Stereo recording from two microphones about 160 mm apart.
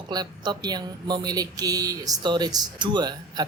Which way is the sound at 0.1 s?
25° right (ahead or behind).